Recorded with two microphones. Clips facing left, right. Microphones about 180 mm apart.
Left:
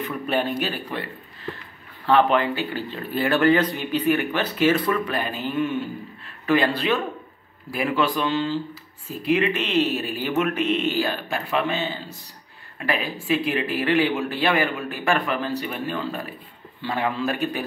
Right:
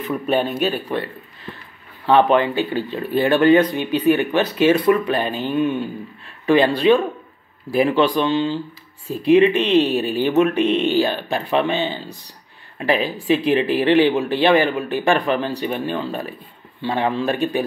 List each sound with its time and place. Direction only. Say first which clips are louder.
0.3 s a man's voice: right 5 dB; 25° right (ahead or behind)
2.0 s a man's voice: right 4 dB; 20° right (ahead or behind)